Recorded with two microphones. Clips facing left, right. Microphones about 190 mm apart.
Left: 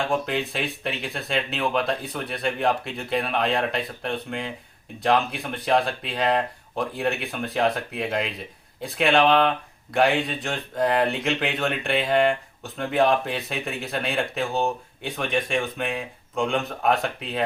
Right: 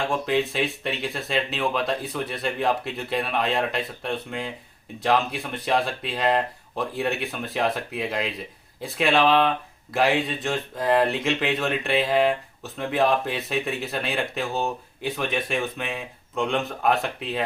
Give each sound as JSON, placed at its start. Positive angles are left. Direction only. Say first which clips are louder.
{"t": 0.1, "sound": "speech", "louder": "right 2 dB", "side_deg": 0}